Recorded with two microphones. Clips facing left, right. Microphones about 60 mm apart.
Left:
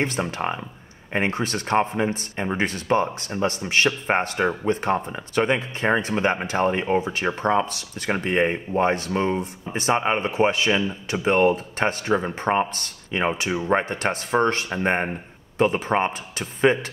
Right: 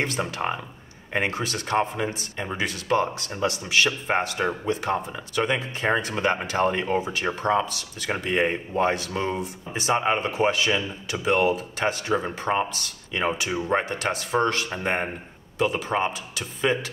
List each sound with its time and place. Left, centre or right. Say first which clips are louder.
0.0 s speech: left 2 dB; left
13.5 s speech: left 2 dB; left